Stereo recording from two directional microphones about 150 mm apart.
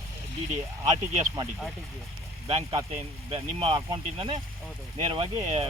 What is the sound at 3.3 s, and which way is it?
Speech, 35° right (ahead or behind).